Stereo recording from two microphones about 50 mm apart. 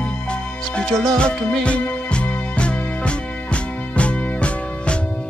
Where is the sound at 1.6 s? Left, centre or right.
Left.